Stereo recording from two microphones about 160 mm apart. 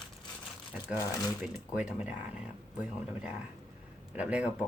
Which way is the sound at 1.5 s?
5° right (ahead or behind).